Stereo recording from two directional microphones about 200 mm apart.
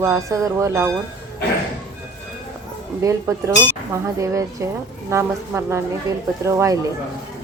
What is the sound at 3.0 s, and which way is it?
Speech, 15° right (ahead or behind).